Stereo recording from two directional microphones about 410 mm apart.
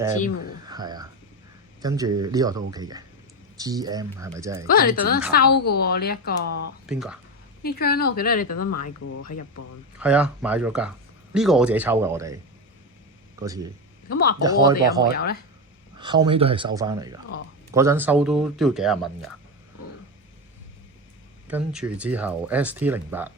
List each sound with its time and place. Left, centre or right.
0.7 s speech: centre
4.7 s speech: left
6.8 s speech: centre
7.6 s speech: left
8.5 s speech: left
10.0 s speech: centre
13.4 s speech: centre
14.1 s speech: left
14.4 s speech: centre
15.1 s speech: left
16.0 s speech: centre
21.4 s speech: centre